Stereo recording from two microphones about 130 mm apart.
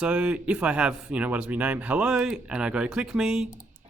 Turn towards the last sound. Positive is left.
turn(degrees=-5)  # may be behind; listen again after turning